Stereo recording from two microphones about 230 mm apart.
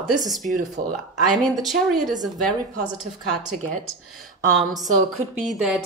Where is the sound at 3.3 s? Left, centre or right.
Right.